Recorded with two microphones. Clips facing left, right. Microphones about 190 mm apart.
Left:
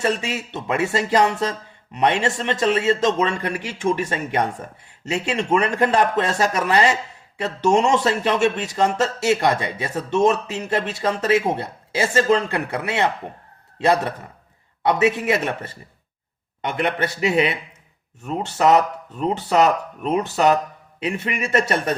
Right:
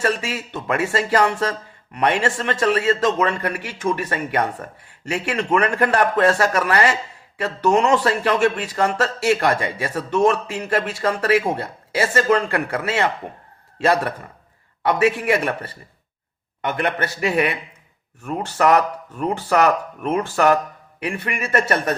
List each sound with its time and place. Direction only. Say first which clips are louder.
0.0 s speech: even; 25° left (ahead or behind)